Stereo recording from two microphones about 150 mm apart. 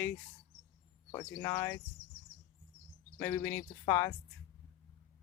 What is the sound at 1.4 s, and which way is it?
Speech, 20° left (ahead or behind).